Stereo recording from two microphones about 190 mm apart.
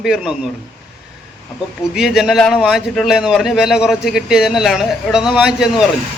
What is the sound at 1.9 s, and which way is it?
A man's voice, centre (ahead or behind).